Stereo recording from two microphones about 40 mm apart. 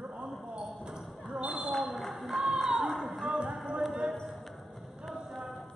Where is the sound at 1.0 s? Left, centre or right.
Centre.